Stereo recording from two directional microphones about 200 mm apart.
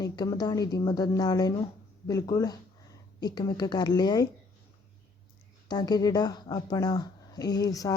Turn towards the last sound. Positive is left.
turn(degrees=20)  # may be behind; listen again after turning